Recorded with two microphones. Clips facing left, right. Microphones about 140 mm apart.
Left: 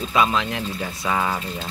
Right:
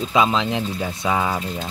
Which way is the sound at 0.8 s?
10° right (ahead or behind).